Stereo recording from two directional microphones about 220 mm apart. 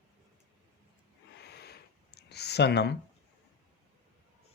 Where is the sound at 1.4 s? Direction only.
50° left (ahead or behind).